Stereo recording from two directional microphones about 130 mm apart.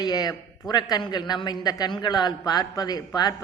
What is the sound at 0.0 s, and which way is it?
A man's voice, 30° left (ahead or behind).